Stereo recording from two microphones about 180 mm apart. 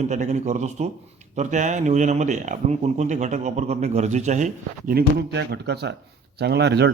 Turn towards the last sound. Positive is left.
turn(degrees=-70)  # may be behind; listen again after turning